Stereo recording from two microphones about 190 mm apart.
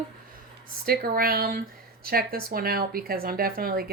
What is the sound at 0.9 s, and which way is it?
Speech, 50° right (ahead or behind).